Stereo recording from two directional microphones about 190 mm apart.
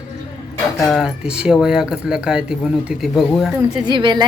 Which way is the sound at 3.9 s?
25° right (ahead or behind).